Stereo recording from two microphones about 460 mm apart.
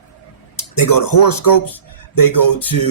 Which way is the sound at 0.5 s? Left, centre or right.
Left.